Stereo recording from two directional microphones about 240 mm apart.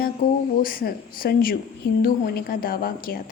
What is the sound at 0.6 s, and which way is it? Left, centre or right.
A woman's voice, left.